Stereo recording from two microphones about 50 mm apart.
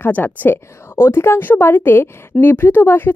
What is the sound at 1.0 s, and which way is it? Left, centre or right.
A woman's voice, left.